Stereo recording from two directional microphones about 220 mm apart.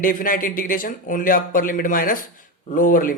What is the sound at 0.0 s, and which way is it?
Speech, 40° left (ahead or behind).